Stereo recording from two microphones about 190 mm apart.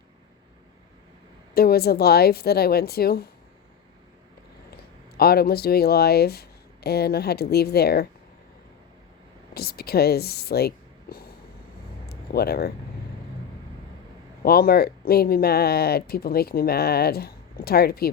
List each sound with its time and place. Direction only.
1.5 s speech: 55° left (ahead or behind)
5.1 s speech: 55° left (ahead or behind)
9.6 s speech: 55° left (ahead or behind)
12.0 s a sound: 55° left (ahead or behind)
14.4 s speech: 55° left (ahead or behind)